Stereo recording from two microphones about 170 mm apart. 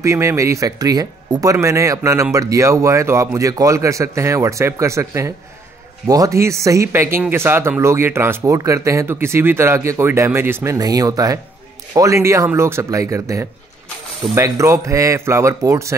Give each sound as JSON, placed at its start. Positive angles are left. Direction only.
{"t": 0.0, "sound": "speech", "side_deg": -15}